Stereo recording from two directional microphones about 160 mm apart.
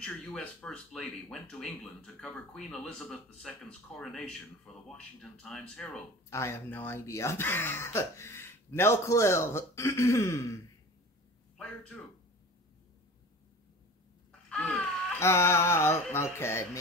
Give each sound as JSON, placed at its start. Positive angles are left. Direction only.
{"t": 0.0, "sound": "speech", "side_deg": 5}
{"t": 6.3, "sound": "speech", "side_deg": 15}
{"t": 11.5, "sound": "a man's voice", "side_deg": 5}
{"t": 14.5, "sound": "speech", "side_deg": 5}